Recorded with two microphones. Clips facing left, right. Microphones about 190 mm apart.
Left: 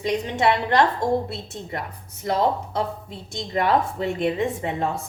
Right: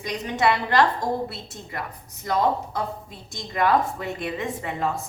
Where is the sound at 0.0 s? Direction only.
25° left (ahead or behind).